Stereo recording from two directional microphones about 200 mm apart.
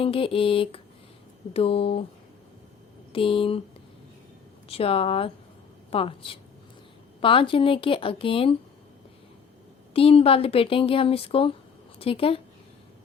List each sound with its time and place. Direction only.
0.0 s speech: 25° left (ahead or behind)
3.1 s speech: 25° left (ahead or behind)
4.7 s speech: 30° left (ahead or behind)
9.9 s a woman's voice: 30° left (ahead or behind)